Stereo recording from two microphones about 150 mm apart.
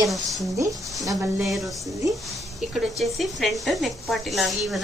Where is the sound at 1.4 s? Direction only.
Centre (ahead or behind).